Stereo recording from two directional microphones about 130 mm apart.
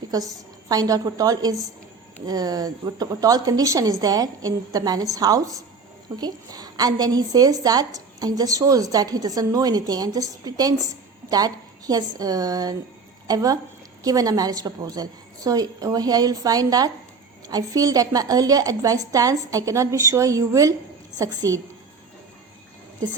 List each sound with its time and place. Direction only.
0.1 s a woman's voice: 30° right (ahead or behind)